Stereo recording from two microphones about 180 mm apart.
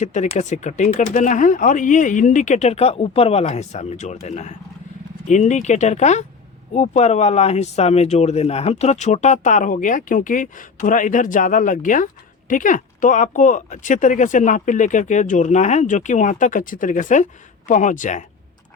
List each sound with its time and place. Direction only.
0.0 s speech: 40° left (ahead or behind)